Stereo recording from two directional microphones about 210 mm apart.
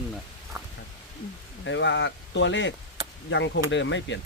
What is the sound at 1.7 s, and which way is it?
Speech, 60° left (ahead or behind).